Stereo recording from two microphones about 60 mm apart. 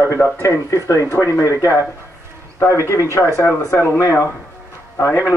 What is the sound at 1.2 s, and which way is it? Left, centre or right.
Speech, left.